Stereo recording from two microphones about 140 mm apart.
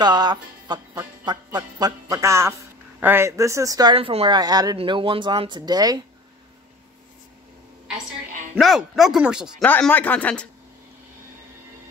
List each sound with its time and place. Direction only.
0.0 s music: 30° right (ahead or behind)
3.0 s speech: 15° right (ahead or behind)
3.9 s speech: 40° right (ahead or behind)
4.3 s speech: 30° right (ahead or behind)
8.5 s speech: centre (ahead or behind)
9.6 s a man's voice: 10° left (ahead or behind)